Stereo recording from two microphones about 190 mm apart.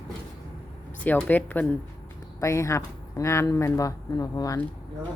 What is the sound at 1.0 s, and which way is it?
Speech, 10° left (ahead or behind).